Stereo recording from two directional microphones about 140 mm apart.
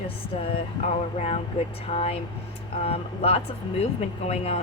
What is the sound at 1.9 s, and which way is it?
Speech, 50° left (ahead or behind).